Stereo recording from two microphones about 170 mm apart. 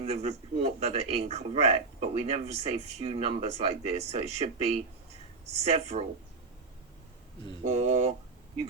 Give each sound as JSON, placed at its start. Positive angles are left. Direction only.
{"t": 0.0, "sound": "speech", "side_deg": -40}
{"t": 7.6, "sound": "speech", "side_deg": -40}